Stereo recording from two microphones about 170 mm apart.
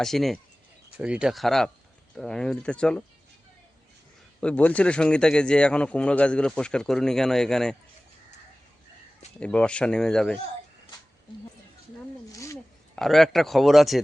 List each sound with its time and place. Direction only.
0.0 s speech: centre (ahead or behind)
4.4 s speech: 5° left (ahead or behind)
9.4 s speech: 5° left (ahead or behind)
12.3 s a sound: 20° left (ahead or behind)
13.0 s speech: centre (ahead or behind)